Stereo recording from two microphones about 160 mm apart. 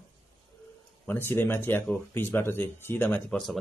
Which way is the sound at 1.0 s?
15° left (ahead or behind).